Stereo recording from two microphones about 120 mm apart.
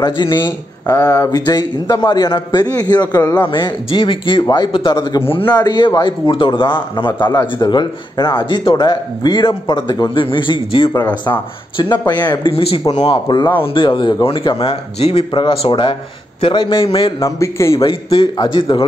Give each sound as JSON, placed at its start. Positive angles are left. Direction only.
{"t": 0.0, "sound": "speech", "side_deg": 40}
{"t": 0.9, "sound": "a man's voice", "side_deg": 25}
{"t": 12.5, "sound": "a man's voice", "side_deg": 50}
{"t": 12.8, "sound": "a man's voice", "side_deg": 35}
{"t": 17.2, "sound": "a man's voice", "side_deg": 25}
{"t": 17.8, "sound": "a man's voice", "side_deg": 45}